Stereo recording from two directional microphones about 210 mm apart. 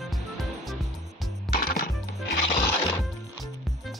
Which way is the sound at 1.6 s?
45° left (ahead or behind).